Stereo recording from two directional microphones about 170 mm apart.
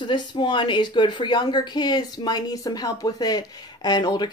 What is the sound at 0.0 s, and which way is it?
Speech, 25° left (ahead or behind).